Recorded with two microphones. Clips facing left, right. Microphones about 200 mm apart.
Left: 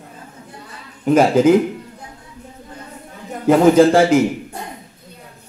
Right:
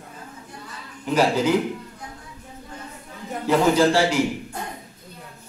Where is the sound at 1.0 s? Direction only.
50° left (ahead or behind).